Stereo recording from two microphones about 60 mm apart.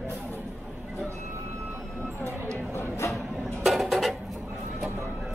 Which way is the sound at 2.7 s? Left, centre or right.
Left.